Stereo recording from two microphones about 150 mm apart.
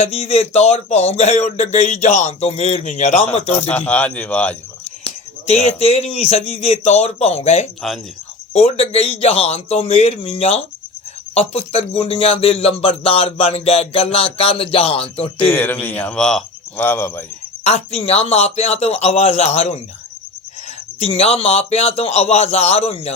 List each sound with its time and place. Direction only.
0.0 s speech: 45° left (ahead or behind)
3.7 s speech: 10° left (ahead or behind)
5.0 s speech: 45° left (ahead or behind)
15.4 s speech: 10° left (ahead or behind)
17.6 s speech: 45° left (ahead or behind)
21.0 s speech: 40° left (ahead or behind)